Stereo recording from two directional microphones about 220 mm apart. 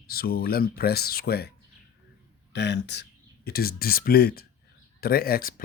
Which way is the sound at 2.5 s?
50° left (ahead or behind).